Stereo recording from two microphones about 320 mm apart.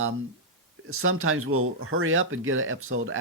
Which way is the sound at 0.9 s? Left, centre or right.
Right.